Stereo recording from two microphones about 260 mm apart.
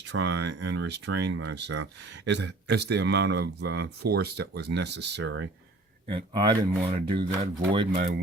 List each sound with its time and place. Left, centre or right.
0.1 s speech: right
6.1 s speech: centre
7.9 s speech: right